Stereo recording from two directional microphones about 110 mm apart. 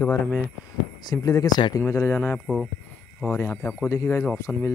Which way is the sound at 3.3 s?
25° left (ahead or behind).